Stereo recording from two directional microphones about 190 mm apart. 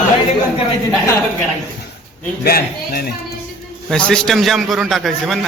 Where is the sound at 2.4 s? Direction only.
50° left (ahead or behind).